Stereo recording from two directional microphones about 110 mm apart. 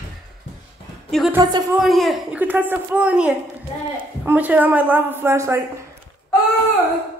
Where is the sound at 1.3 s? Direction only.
40° right (ahead or behind).